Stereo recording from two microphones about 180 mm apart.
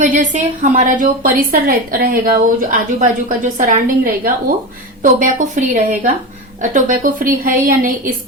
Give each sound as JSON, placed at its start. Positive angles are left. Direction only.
{"t": 0.0, "sound": "a woman's voice", "side_deg": -45}